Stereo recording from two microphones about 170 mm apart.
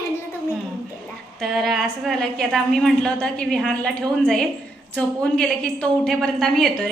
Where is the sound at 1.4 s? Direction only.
Centre (ahead or behind).